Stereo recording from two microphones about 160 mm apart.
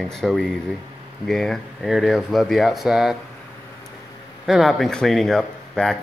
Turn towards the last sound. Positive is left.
turn(degrees=5)  # may be behind; listen again after turning